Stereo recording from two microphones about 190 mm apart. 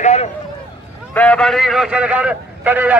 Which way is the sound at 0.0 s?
35° left (ahead or behind).